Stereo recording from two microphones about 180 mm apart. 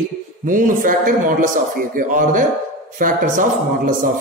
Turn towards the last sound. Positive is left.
turn(degrees=-50)  # may be behind; listen again after turning